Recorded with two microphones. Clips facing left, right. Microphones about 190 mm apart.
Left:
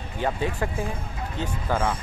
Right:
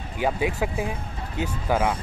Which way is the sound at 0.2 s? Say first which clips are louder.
Right 2 dB; 10° right (ahead or behind).